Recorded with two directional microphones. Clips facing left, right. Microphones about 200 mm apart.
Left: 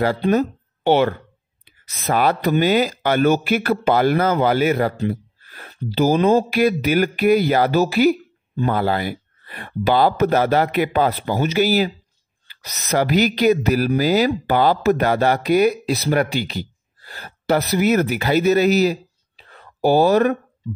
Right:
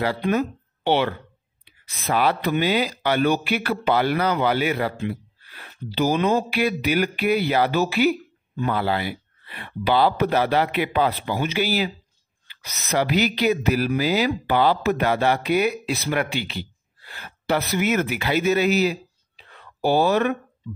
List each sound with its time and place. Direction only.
0.2 s speech: 35° left (ahead or behind)